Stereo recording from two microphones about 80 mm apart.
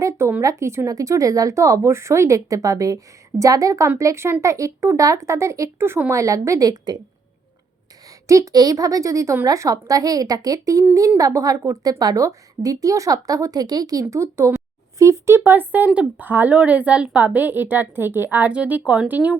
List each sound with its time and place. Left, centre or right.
0.0 s a sound: right
0.4 s a woman's voice: right
8.3 s a woman's voice: right
14.1 s speech: right
14.9 s a sound: right
15.4 s a woman's voice: right